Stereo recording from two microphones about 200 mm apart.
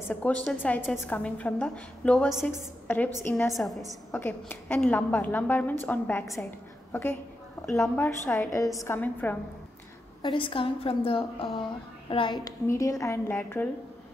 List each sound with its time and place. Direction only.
0.1 s a woman's voice: 5° left (ahead or behind)
3.5 s a woman's voice: centre (ahead or behind)
10.2 s a woman's voice: 25° left (ahead or behind)